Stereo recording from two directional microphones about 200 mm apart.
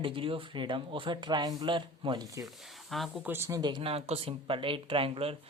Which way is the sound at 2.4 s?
Centre (ahead or behind).